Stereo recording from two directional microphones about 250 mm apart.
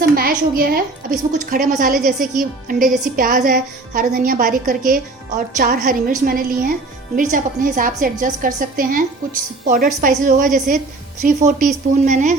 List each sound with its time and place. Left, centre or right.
0.0 s a woman's voice: right
2.8 s a woman's voice: centre
3.2 s a woman's voice: right